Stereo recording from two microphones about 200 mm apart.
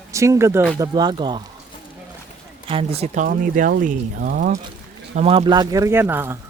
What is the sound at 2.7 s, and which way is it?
Speech, 30° right (ahead or behind).